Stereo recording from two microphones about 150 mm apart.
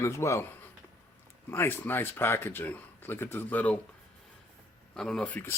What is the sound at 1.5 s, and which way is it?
Speech, 15° left (ahead or behind).